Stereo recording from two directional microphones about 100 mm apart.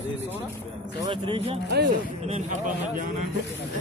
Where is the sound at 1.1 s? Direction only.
60° right (ahead or behind).